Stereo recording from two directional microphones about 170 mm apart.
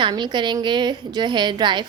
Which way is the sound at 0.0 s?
25° right (ahead or behind).